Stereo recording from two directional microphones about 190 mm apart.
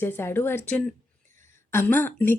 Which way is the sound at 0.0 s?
10° left (ahead or behind).